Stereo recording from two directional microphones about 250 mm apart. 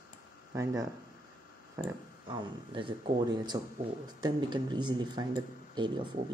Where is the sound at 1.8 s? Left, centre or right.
Centre.